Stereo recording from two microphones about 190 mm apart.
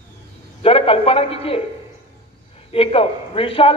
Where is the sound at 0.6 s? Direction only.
30° left (ahead or behind).